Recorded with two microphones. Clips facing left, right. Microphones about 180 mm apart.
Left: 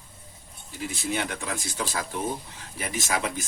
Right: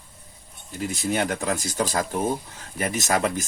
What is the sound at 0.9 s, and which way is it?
Speech, 40° right (ahead or behind).